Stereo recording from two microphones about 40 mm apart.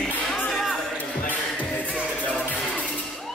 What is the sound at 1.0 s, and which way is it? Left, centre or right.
Music, left.